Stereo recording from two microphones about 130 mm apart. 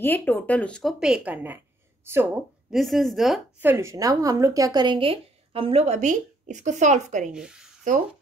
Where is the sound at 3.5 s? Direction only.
20° right (ahead or behind); by 7.3 s 70° right (ahead or behind).